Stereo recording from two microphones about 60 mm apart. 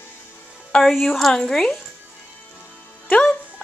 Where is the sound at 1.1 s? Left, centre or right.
Centre.